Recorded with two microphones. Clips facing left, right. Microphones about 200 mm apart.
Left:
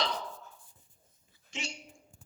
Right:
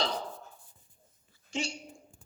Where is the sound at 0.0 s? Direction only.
30° right (ahead or behind).